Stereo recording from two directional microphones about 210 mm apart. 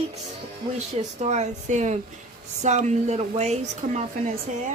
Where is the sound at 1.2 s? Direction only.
35° right (ahead or behind).